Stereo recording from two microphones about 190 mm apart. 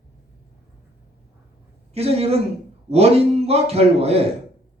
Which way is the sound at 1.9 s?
30° right (ahead or behind).